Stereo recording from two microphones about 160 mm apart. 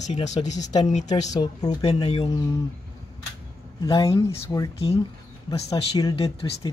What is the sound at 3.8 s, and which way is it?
Speech, 20° left (ahead or behind).